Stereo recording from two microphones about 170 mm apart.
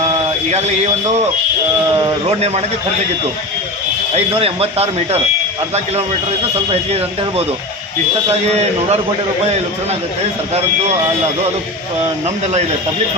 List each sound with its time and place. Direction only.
0.0 s a sound: 40° right (ahead or behind)
2.2 s speech: 40° right (ahead or behind)
4.1 s speech: 35° right (ahead or behind)
6.7 s speech: 35° right (ahead or behind)